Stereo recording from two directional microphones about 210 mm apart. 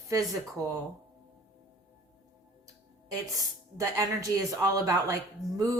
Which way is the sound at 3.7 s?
15° right (ahead or behind).